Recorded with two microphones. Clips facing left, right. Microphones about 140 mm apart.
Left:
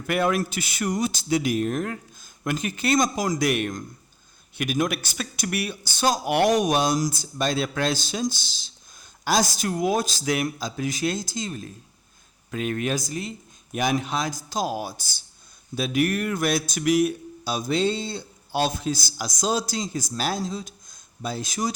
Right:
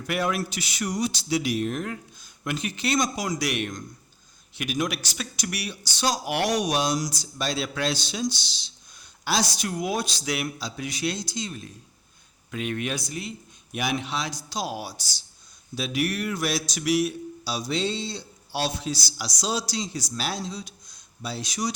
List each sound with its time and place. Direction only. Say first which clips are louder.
0.1 s speech: left 4 dB; 50° left (ahead or behind)